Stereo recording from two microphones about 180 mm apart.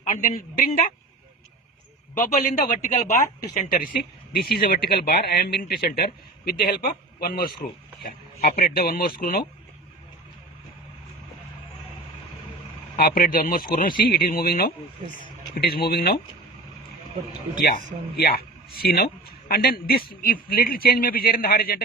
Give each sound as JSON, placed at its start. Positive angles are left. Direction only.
{"t": 0.0, "sound": "a woman's voice", "side_deg": 45}
{"t": 2.1, "sound": "a man's voice", "side_deg": 50}
{"t": 4.3, "sound": "speech", "side_deg": 60}
{"t": 13.0, "sound": "a man's voice", "side_deg": 55}
{"t": 18.8, "sound": "speech", "side_deg": 60}